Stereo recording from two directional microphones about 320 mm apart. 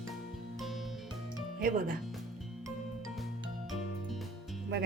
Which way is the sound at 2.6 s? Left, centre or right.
Centre.